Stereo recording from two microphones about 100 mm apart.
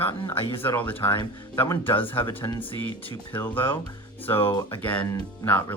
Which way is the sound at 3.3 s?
20° left (ahead or behind).